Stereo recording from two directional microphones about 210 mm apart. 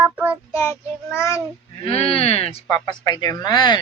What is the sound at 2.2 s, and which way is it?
A woman's voice, 30° left (ahead or behind).